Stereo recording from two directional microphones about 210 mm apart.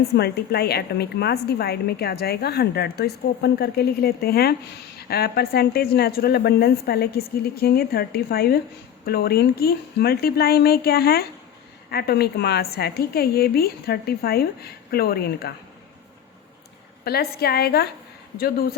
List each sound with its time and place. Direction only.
0.2 s a woman's voice: 50° left (ahead or behind)
17.0 s a woman's voice: 50° left (ahead or behind)